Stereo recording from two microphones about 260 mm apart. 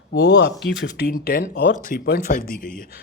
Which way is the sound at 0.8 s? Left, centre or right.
Left.